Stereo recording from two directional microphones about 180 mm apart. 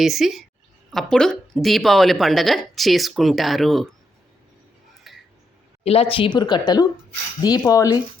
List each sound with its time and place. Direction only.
0.0 s a woman's voice: centre (ahead or behind)
5.1 s a sound: centre (ahead or behind)
5.8 s speech: 35° left (ahead or behind); by 7.9 s 20° left (ahead or behind)